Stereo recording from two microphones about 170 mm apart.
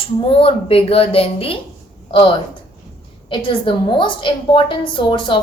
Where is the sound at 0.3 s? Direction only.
35° left (ahead or behind).